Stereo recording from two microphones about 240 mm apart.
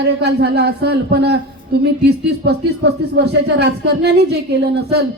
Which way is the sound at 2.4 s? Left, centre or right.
Right.